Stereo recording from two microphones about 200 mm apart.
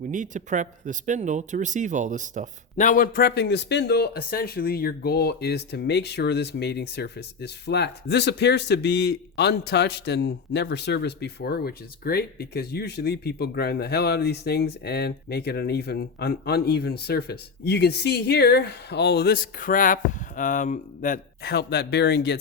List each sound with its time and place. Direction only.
0.1 s speech: 40° right (ahead or behind)
2.7 s speech: 40° left (ahead or behind); by 22.4 s 55° left (ahead or behind)